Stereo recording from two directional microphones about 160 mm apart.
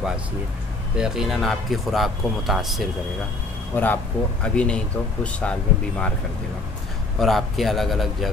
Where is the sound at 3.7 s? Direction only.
10° left (ahead or behind).